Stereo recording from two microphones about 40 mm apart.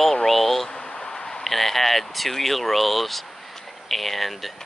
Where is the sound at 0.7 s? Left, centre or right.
Centre.